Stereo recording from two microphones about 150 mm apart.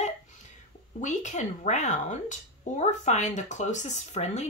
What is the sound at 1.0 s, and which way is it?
A woman's voice, 55° left (ahead or behind).